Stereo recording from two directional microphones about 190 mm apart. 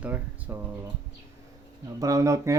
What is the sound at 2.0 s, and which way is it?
Speech, 15° right (ahead or behind).